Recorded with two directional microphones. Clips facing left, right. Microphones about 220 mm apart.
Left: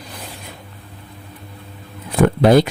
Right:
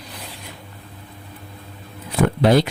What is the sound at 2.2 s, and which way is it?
Speech, 50° left (ahead or behind).